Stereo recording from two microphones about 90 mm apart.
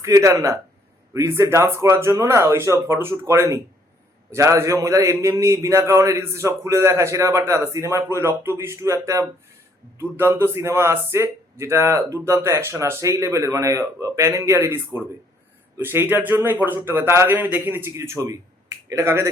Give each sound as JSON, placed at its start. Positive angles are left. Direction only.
{"t": 0.0, "sound": "a man's voice", "side_deg": -35}